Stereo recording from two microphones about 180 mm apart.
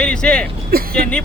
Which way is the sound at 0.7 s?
55° right (ahead or behind).